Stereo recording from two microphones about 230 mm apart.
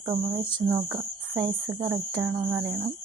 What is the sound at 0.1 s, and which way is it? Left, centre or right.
Speech, centre.